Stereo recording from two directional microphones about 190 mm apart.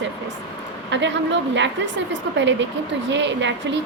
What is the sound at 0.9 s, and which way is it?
A woman's voice, 70° right (ahead or behind).